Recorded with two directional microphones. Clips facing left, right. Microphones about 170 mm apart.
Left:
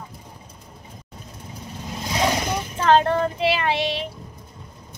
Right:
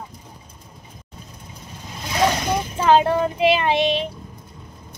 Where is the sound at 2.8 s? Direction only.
10° right (ahead or behind).